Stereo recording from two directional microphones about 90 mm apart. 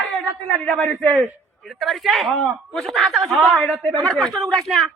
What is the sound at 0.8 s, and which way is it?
Speech, centre (ahead or behind).